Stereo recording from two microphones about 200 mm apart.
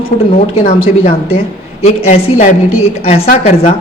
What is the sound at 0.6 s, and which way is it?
A woman's voice, 30° left (ahead or behind).